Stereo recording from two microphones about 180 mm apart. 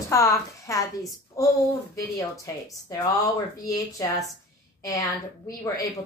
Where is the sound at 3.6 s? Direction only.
20° left (ahead or behind).